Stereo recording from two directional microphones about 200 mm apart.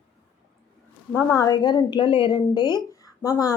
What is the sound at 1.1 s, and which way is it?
A woman's voice, 15° left (ahead or behind).